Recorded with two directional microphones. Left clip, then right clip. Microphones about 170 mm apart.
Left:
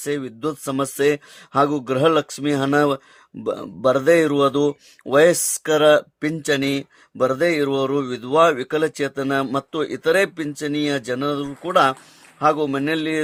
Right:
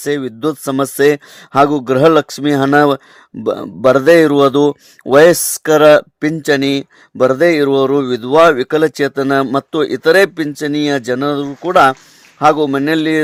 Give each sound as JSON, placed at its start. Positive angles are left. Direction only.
{"t": 0.0, "sound": "a man's voice", "side_deg": -40}